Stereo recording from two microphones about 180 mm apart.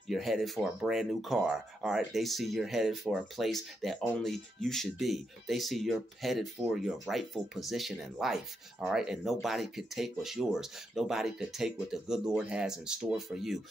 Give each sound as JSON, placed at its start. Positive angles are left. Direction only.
{"t": 0.1, "sound": "speech", "side_deg": 0}